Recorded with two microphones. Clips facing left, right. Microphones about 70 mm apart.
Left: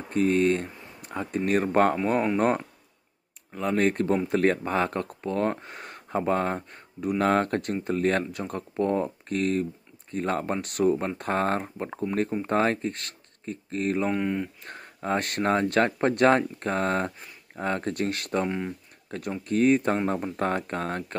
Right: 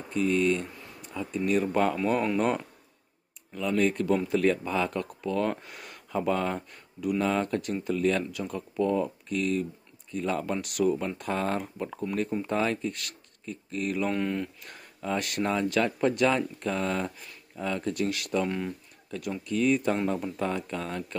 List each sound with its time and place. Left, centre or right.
0.1 s speech: left
2.0 s speech: left
7.2 s speech: left
14.0 s speech: centre
14.6 s speech: left
18.5 s speech: centre
19.0 s speech: left